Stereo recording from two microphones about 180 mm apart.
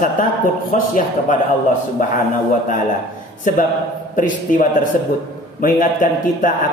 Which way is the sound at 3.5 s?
50° left (ahead or behind).